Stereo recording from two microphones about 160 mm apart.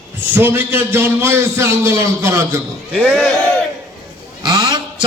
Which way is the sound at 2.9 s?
Centre (ahead or behind).